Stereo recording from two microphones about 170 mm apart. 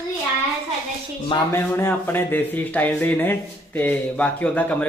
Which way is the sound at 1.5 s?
15° left (ahead or behind).